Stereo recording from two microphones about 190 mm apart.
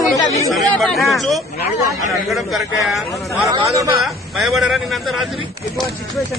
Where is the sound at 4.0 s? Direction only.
Centre (ahead or behind).